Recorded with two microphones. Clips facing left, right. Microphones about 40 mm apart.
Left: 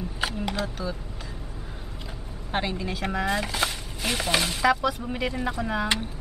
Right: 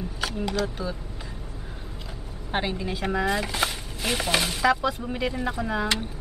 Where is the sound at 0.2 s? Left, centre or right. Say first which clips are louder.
Left 2 dB; centre.